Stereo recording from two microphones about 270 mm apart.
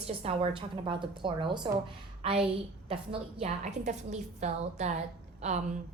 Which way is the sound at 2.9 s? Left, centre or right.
Right.